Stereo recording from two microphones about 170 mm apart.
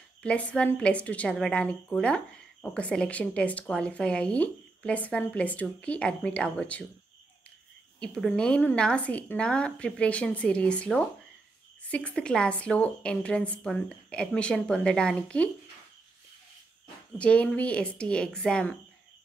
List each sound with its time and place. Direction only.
0.2 s a woman's voice: 5° left (ahead or behind)
8.0 s a woman's voice: 5° left (ahead or behind)
17.2 s a woman's voice: 5° left (ahead or behind)